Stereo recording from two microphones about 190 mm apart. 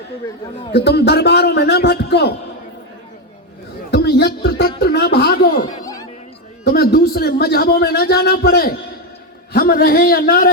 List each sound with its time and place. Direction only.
0.9 s a man's voice: 60° left (ahead or behind)
3.9 s a sound: 60° left (ahead or behind)
4.8 s a man's voice: 55° left (ahead or behind)
5.6 s music: 20° left (ahead or behind)
6.7 s a man's voice: 55° left (ahead or behind)